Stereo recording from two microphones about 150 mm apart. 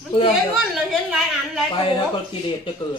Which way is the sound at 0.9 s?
Centre (ahead or behind).